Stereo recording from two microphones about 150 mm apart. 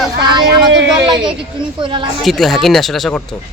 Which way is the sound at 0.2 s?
30° right (ahead or behind).